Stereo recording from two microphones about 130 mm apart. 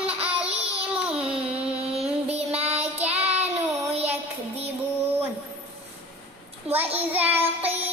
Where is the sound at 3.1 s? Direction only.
50° right (ahead or behind).